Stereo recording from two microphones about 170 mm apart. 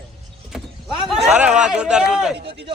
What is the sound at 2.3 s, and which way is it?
Speech, 75° right (ahead or behind).